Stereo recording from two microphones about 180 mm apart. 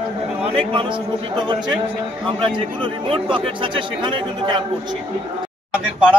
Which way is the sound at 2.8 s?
30° right (ahead or behind).